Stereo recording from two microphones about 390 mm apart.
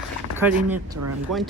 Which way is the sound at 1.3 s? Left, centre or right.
Right.